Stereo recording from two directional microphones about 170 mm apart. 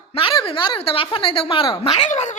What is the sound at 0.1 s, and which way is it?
Speech, 30° left (ahead or behind).